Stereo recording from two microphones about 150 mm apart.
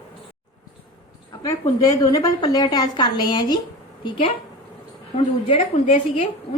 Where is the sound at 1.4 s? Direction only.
25° left (ahead or behind).